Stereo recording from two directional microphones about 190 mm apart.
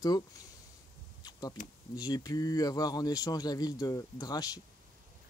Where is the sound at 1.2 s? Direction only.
20° left (ahead or behind).